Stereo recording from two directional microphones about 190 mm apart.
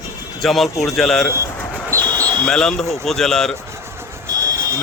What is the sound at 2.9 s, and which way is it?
Speech, centre (ahead or behind).